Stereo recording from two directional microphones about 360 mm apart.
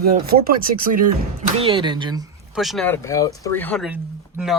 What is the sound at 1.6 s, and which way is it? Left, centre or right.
Speech, centre.